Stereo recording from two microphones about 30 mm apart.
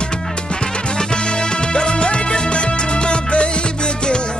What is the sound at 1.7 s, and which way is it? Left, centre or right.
Music, left.